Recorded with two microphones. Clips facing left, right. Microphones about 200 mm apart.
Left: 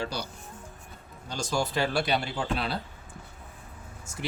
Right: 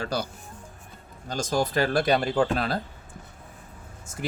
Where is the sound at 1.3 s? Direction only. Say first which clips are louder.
Right 4 dB; 50° right (ahead or behind).